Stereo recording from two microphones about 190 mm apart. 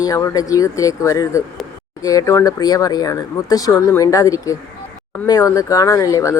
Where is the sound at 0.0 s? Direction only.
20° left (ahead or behind).